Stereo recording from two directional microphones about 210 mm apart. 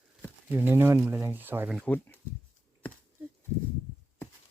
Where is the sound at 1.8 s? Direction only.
10° left (ahead or behind).